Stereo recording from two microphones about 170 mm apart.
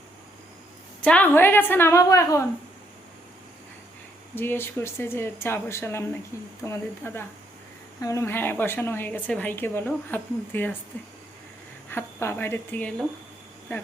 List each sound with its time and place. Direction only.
1.0 s a woman's voice: 10° left (ahead or behind)
4.4 s a woman's voice: 15° left (ahead or behind)
11.9 s a woman's voice: 15° left (ahead or behind)